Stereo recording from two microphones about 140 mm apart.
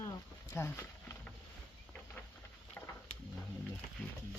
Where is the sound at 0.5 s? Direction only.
20° left (ahead or behind).